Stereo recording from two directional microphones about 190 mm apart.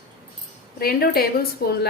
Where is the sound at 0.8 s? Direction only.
50° left (ahead or behind).